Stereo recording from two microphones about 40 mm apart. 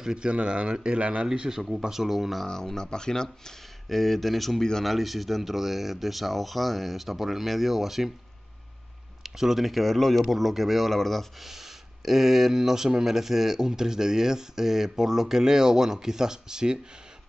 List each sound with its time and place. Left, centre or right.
0.0 s speech: right
1.2 s speech: centre
2.4 s speech: centre
9.2 s speech: centre
11.4 s speech: centre